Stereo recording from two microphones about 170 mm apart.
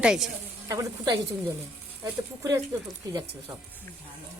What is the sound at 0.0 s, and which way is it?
Speech, 5° right (ahead or behind).